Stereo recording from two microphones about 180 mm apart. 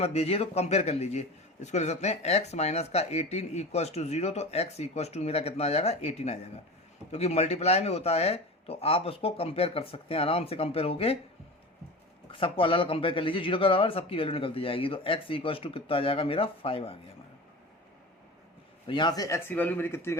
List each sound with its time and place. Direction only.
0.0 s speech: 35° left (ahead or behind)
12.3 s speech: 30° left (ahead or behind)
18.9 s a man's voice: 25° left (ahead or behind)